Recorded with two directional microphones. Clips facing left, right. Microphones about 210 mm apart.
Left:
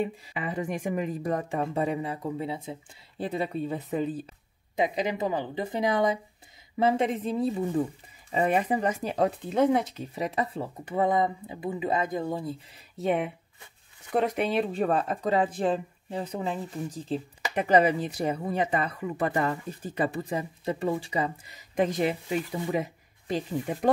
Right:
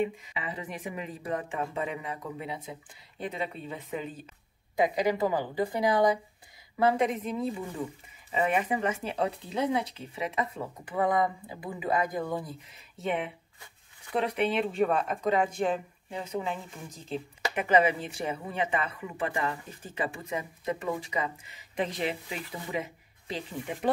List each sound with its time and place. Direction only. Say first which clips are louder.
0.3 s a woman's voice: left 6 dB; 50° left (ahead or behind)
4.7 s a woman's voice: right 1 dB; 20° left (ahead or behind); by 23.9 s 40° left (ahead or behind)